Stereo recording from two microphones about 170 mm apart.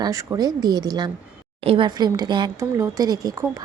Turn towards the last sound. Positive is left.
turn(degrees=-20)  # may be behind; listen again after turning